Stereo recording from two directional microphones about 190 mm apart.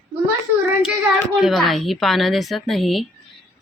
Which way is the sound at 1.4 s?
Centre (ahead or behind).